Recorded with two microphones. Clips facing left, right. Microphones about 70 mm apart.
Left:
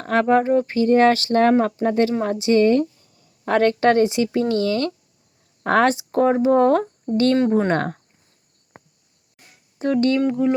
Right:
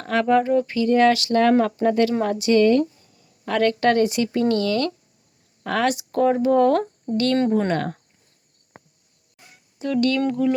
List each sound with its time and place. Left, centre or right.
0.0 s speech: left
3.2 s speech: left
5.6 s speech: left
5.9 s speech: left
8.7 s cricket: left
9.7 s speech: left
10.2 s speech: centre